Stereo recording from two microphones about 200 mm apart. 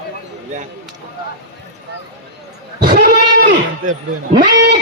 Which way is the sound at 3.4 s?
55° right (ahead or behind).